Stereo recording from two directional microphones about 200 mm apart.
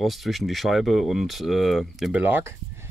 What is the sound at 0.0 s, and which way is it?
Speech, centre (ahead or behind).